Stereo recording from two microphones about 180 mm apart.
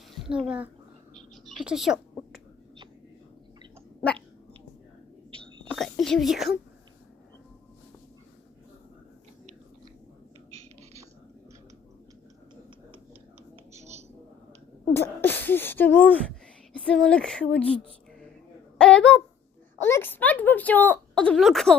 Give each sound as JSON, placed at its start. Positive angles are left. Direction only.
{"t": 0.3, "sound": "speech", "side_deg": -5}
{"t": 1.1, "sound": "bird", "side_deg": 0}
{"t": 5.6, "sound": "whispering", "side_deg": 0}
{"t": 13.7, "sound": "a sound", "side_deg": -40}
{"t": 14.9, "sound": "throat clearing", "side_deg": 10}
{"t": 16.7, "sound": "speech", "side_deg": 5}
{"t": 18.8, "sound": "a sound", "side_deg": 5}
{"t": 19.8, "sound": "speech", "side_deg": 10}